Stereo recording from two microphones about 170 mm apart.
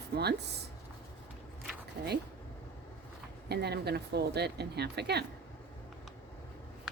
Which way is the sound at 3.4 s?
70° right (ahead or behind).